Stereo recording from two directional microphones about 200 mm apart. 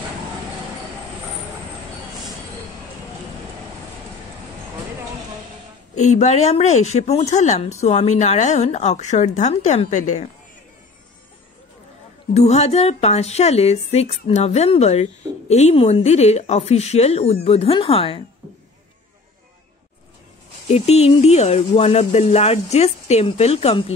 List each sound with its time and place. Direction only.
5.9 s a woman's voice: 35° left (ahead or behind)
12.4 s a woman's voice: 35° left (ahead or behind)
20.6 s a woman's voice: 30° left (ahead or behind)